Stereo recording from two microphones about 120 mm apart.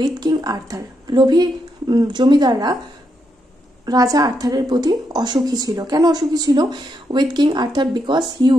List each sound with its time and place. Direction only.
0.0 s speech: 35° right (ahead or behind)
3.8 s speech: 30° right (ahead or behind)